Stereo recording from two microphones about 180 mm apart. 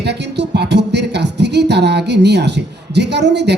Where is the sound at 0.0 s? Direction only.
70° right (ahead or behind).